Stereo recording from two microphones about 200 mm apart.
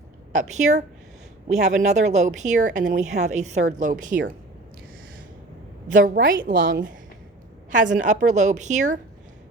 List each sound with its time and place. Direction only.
0.3 s speech: 35° right (ahead or behind)
5.9 s a woman's voice: 45° right (ahead or behind)